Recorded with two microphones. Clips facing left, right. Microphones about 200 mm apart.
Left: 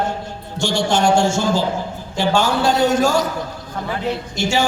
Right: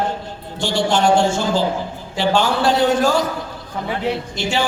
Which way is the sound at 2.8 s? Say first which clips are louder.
Even; 45° left (ahead or behind).